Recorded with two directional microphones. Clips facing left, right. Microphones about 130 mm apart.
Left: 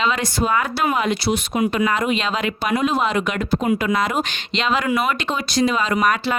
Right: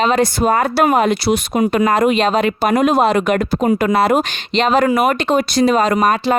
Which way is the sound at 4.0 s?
65° right (ahead or behind).